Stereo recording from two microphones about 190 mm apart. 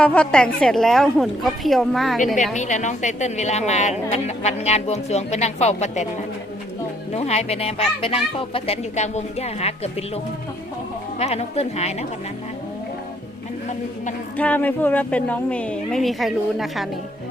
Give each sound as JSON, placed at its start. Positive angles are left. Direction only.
{"t": 0.0, "sound": "a woman's voice", "side_deg": 5}
{"t": 2.6, "sound": "speech", "side_deg": 40}
{"t": 7.1, "sound": "speech", "side_deg": 35}
{"t": 11.2, "sound": "speech", "side_deg": 35}
{"t": 14.3, "sound": "a woman's voice", "side_deg": 10}